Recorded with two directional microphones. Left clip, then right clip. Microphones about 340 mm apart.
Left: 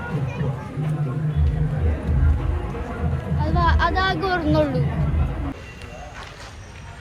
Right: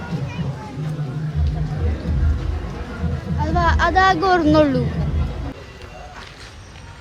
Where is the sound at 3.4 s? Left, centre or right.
Right.